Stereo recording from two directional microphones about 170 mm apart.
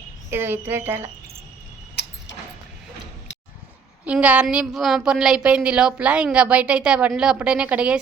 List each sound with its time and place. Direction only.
0.3 s a woman's voice: 10° right (ahead or behind)
4.0 s a woman's voice: 10° right (ahead or behind)